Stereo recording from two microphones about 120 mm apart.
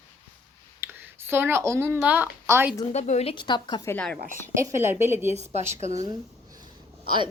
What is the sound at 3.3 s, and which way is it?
Speech, 40° left (ahead or behind).